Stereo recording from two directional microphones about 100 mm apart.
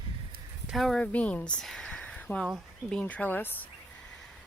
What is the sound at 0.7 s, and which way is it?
Speech, centre (ahead or behind).